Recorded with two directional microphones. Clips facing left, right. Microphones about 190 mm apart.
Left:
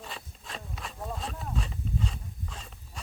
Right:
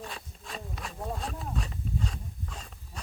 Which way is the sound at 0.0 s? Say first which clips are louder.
Right 2 dB; centre (ahead or behind).